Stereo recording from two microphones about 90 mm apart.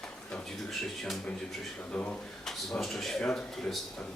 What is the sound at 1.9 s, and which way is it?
Speech, 15° left (ahead or behind).